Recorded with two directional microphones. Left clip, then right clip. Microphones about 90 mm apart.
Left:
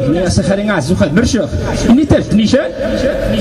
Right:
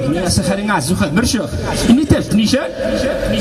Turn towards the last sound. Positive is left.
turn(degrees=-25)  # may be behind; listen again after turning